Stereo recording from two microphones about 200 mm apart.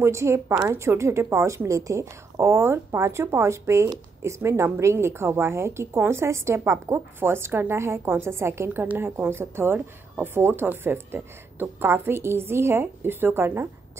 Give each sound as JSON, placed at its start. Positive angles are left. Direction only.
{"t": 0.0, "sound": "a woman's voice", "side_deg": -15}